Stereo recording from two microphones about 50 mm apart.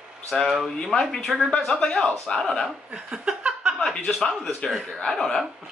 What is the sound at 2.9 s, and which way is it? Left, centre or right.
Speech, centre.